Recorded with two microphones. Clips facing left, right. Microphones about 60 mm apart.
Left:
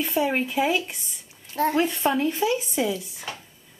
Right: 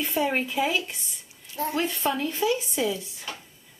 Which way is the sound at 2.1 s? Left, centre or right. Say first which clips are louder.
Left 2 dB; centre.